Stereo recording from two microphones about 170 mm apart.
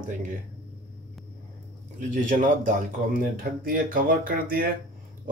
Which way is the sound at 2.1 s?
50° right (ahead or behind).